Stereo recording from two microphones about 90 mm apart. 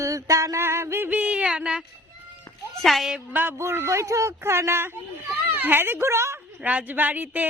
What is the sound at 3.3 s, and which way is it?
Speech, 20° right (ahead or behind).